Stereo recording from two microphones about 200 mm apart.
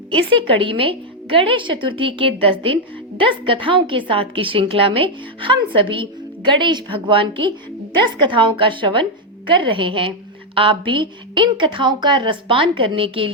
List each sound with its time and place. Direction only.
0.1 s a woman's voice: 25° right (ahead or behind)